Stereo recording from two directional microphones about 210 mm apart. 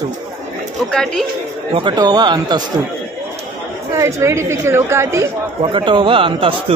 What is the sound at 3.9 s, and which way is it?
Speech, 15° right (ahead or behind).